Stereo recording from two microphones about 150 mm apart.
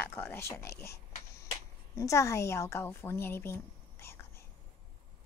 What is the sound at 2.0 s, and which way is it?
A woman's voice, 20° left (ahead or behind).